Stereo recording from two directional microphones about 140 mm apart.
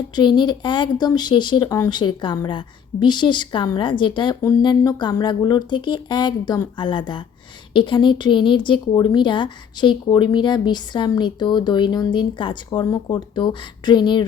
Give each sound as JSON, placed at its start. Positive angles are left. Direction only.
{"t": 0.2, "sound": "speech", "side_deg": 35}